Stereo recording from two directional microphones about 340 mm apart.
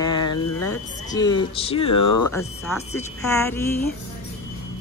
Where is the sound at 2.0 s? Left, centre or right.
Left.